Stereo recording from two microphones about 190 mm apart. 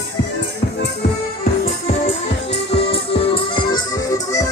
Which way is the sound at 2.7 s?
30° left (ahead or behind).